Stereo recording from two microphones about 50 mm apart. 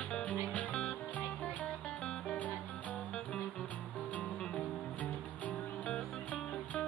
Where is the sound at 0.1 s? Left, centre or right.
Left.